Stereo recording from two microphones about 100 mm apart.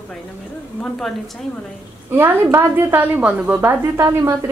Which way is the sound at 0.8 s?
5° left (ahead or behind).